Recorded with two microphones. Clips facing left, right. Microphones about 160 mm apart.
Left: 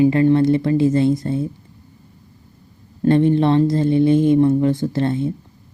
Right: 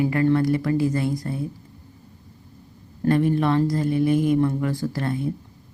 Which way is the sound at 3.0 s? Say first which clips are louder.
Left 5 dB; 25° left (ahead or behind).